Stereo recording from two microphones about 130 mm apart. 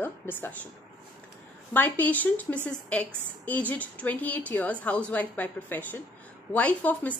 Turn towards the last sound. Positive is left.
turn(degrees=10)  # may be behind; listen again after turning